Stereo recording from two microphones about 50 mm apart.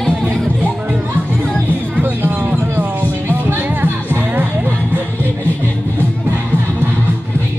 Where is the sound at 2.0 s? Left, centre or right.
Right.